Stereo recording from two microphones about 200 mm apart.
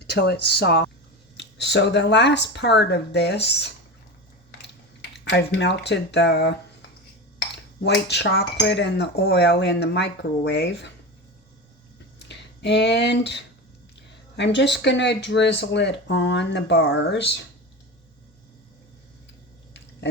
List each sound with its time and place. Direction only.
0.1 s speech: 55° left (ahead or behind)
5.1 s speech: 60° left (ahead or behind)
12.3 s speech: 60° left (ahead or behind)